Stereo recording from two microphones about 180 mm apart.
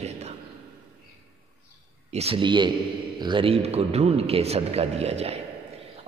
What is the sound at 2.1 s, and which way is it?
A man's voice, 35° right (ahead or behind).